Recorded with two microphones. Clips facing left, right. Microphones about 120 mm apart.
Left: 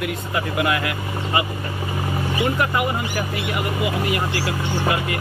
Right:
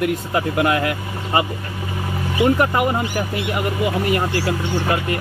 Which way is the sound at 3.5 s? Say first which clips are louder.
Right 3 dB; 40° right (ahead or behind).